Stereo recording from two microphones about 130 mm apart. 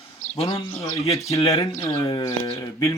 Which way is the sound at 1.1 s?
25° left (ahead or behind).